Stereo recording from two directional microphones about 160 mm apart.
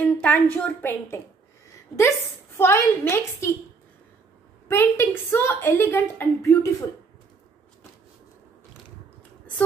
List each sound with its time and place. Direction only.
0.0 s a woman's voice: 10° left (ahead or behind)
4.6 s a woman's voice: 15° left (ahead or behind)